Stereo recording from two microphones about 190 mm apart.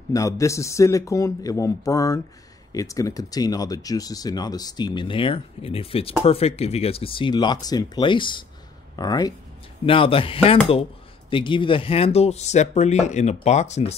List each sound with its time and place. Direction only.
0.1 s speech: 15° left (ahead or behind); by 13.9 s 35° left (ahead or behind)